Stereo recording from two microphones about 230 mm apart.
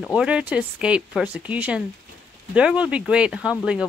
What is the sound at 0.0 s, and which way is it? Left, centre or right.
Speech, centre.